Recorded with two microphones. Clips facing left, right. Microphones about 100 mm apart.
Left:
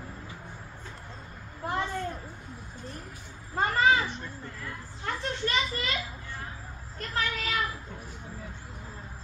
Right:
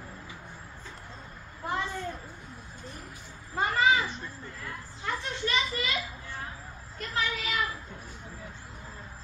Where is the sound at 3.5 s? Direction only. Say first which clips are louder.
Left 1 dB; 45° left (ahead or behind).